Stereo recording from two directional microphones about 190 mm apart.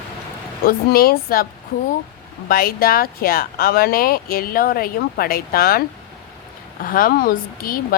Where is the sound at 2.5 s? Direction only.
50° left (ahead or behind).